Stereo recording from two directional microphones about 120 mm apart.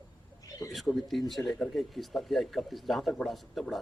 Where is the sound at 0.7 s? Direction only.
Centre (ahead or behind).